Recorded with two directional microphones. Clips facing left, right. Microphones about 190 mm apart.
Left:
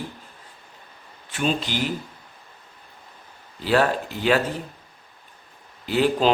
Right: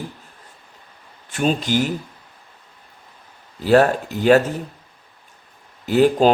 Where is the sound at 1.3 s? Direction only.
45° right (ahead or behind).